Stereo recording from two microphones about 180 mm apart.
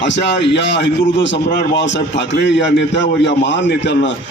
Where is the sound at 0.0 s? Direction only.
80° left.